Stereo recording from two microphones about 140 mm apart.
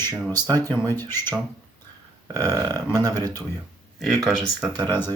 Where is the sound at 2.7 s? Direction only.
25° right (ahead or behind).